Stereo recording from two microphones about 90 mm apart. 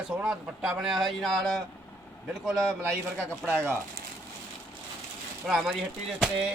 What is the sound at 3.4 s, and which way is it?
Speech, 25° right (ahead or behind).